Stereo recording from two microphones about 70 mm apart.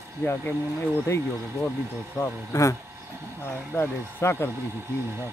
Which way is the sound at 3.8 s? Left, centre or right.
Left.